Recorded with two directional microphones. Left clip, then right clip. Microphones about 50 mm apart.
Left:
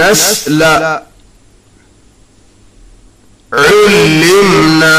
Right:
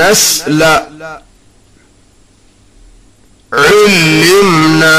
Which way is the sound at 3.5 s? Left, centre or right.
Centre.